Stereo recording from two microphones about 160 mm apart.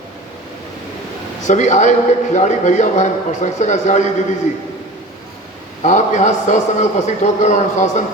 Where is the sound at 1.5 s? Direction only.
45° left (ahead or behind).